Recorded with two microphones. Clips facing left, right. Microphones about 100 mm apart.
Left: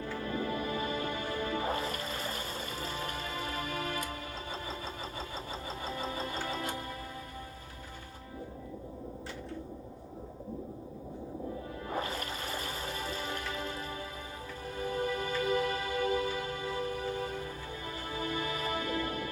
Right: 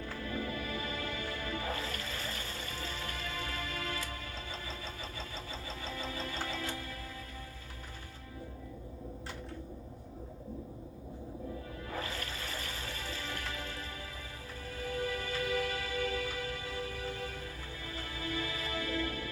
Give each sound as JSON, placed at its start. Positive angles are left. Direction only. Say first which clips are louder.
{"t": 0.2, "sound": "music", "louder": "left 4 dB", "side_deg": 30}
{"t": 5.8, "sound": "music", "louder": "left 3 dB", "side_deg": 30}
{"t": 11.9, "sound": "music", "louder": "left 4 dB", "side_deg": 25}
{"t": 14.8, "sound": "music", "louder": "left 3 dB", "side_deg": 25}